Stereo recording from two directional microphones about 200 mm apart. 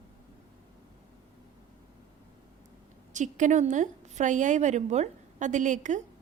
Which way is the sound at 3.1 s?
40° right (ahead or behind).